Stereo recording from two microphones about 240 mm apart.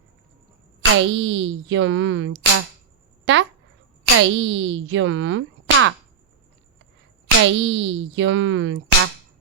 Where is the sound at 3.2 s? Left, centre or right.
Right.